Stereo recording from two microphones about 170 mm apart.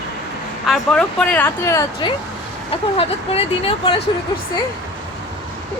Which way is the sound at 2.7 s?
35° left (ahead or behind).